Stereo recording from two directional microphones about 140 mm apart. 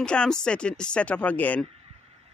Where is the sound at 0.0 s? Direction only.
5° left (ahead or behind).